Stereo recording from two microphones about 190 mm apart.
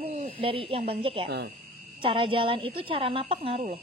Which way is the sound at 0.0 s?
30° right (ahead or behind).